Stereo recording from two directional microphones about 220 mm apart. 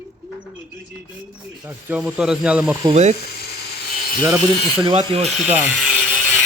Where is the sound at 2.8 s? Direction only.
25° right (ahead or behind).